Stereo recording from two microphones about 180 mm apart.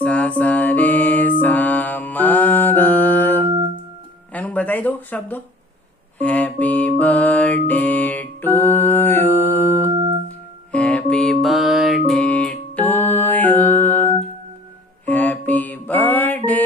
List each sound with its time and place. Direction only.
0.0 s music: 5° left (ahead or behind)
1.4 s mantra: 10° left (ahead or behind)
4.3 s music: 10° left (ahead or behind)
9.9 s music: 25° right (ahead or behind)
10.7 s music: 5° left (ahead or behind)
15.0 s mantra: 10° left (ahead or behind)